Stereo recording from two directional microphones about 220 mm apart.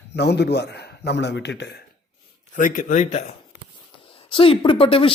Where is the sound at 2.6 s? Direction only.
35° left (ahead or behind).